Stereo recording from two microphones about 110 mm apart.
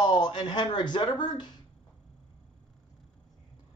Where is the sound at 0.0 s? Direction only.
45° left (ahead or behind).